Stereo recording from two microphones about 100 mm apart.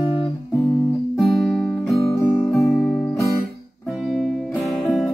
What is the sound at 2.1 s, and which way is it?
Music, 25° left (ahead or behind).